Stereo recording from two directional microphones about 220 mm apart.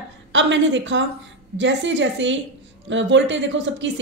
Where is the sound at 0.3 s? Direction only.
55° right (ahead or behind).